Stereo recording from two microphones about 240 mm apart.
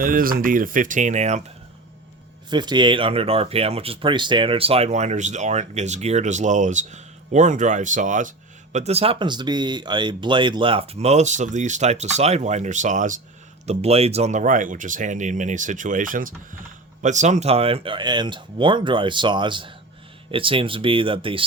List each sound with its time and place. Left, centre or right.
0.0 s speech: right
2.5 s speech: centre